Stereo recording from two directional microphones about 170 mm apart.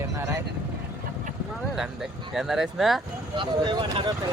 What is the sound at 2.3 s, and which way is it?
Speech, centre (ahead or behind).